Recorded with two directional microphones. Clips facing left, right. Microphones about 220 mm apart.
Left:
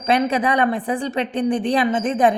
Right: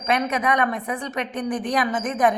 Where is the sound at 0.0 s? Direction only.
30° left (ahead or behind).